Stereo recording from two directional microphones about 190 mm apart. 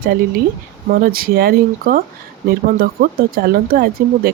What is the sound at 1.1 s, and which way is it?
Speech, 50° right (ahead or behind).